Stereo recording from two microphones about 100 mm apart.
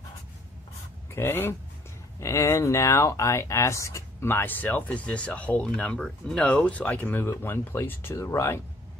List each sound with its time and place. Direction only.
1.1 s speech: 20° left (ahead or behind)